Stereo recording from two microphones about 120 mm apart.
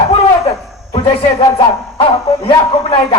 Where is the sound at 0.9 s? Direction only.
45° left (ahead or behind).